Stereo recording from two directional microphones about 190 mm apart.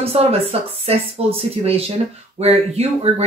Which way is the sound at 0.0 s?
30° right (ahead or behind).